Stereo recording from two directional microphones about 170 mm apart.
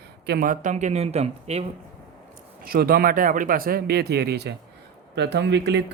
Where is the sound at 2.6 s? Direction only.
60° right (ahead or behind); by 4.6 s 75° right (ahead or behind).